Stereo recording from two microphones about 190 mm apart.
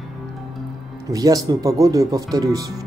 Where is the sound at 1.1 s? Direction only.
20° right (ahead or behind).